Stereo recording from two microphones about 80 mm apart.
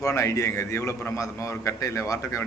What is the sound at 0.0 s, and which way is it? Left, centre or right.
A man's voice, left.